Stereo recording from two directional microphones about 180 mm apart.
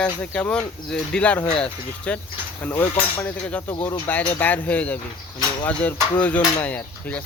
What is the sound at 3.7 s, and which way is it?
Speech, 20° left (ahead or behind).